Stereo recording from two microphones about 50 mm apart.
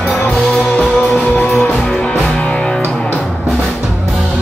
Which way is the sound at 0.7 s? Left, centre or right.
Centre.